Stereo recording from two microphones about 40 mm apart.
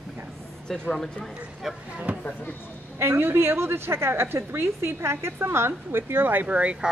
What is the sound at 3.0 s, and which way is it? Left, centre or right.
A woman's voice, right.